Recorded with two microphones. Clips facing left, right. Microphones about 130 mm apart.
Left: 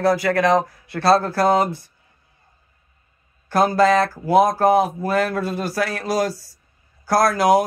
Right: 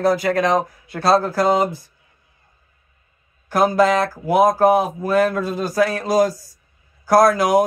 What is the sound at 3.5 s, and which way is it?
Speech, 15° right (ahead or behind).